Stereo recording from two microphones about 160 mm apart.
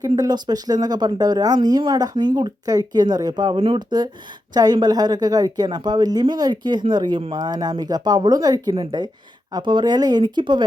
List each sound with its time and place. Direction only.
0.0 s speech: 25° right (ahead or behind)